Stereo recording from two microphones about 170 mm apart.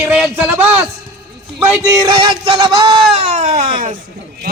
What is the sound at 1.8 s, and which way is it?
Speech, 20° right (ahead or behind).